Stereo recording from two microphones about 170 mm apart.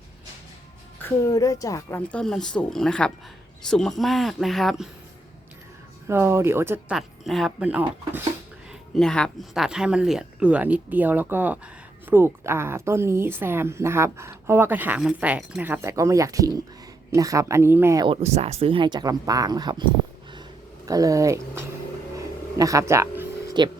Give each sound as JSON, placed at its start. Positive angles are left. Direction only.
{"t": 1.0, "sound": "a woman's voice", "side_deg": 20}
{"t": 2.0, "sound": "speech", "side_deg": 5}
{"t": 6.1, "sound": "speech", "side_deg": -15}
{"t": 6.9, "sound": "speech", "side_deg": 0}
{"t": 9.0, "sound": "speech", "side_deg": 5}
{"t": 18.0, "sound": "speech", "side_deg": -35}
{"t": 22.1, "sound": "a sound", "side_deg": -20}
{"t": 23.6, "sound": "speech", "side_deg": -25}